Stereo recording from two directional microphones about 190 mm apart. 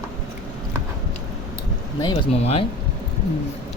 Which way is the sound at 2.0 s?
25° left (ahead or behind).